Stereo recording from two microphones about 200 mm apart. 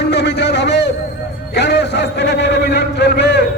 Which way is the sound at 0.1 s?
60° left (ahead or behind).